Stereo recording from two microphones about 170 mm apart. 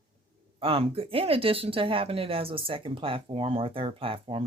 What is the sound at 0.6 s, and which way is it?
Speech, 35° right (ahead or behind).